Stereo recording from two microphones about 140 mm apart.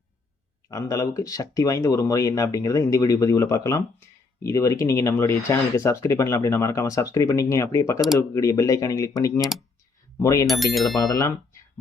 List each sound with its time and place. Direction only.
0.7 s speech: 20° left (ahead or behind)
10.4 s speech: centre (ahead or behind)
11.1 s speech: 25° left (ahead or behind)